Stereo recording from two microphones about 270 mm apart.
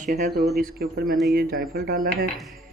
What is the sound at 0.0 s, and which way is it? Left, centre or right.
Speech, right.